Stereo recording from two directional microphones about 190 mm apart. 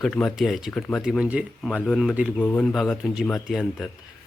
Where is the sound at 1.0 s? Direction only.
5° right (ahead or behind).